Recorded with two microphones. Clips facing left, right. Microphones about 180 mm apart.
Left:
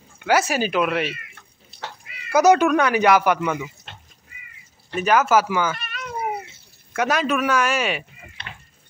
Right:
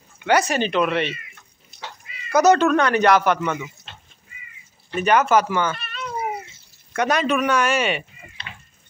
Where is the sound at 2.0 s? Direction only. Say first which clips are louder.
Right 1 dB; 60° left (ahead or behind).